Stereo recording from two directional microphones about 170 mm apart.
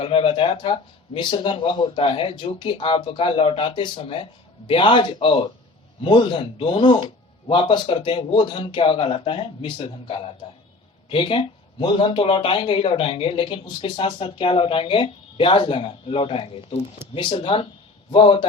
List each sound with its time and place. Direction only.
0.0 s speech: 30° left (ahead or behind)